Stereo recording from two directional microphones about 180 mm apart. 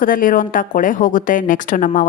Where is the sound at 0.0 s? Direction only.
50° left (ahead or behind).